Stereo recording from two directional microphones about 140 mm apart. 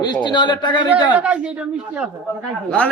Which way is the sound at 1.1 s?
10° right (ahead or behind).